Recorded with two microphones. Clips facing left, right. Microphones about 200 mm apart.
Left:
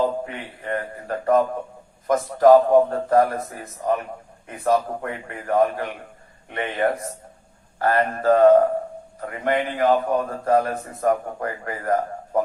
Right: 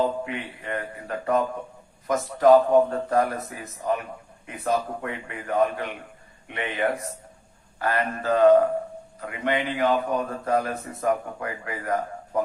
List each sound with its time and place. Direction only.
0.6 s a man's voice: 40° left (ahead or behind)